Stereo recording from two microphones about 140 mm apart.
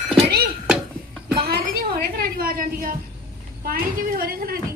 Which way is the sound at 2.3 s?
90° right.